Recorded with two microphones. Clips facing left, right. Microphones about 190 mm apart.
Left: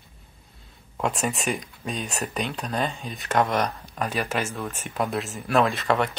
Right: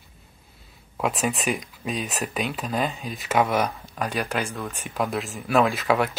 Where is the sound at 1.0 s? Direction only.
Centre (ahead or behind).